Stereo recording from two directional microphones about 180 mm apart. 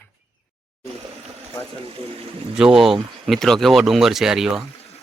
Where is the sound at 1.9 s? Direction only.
30° right (ahead or behind).